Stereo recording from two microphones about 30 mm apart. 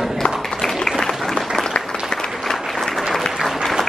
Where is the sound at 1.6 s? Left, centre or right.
Centre.